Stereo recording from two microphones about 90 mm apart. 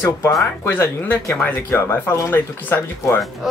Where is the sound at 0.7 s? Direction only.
25° left (ahead or behind).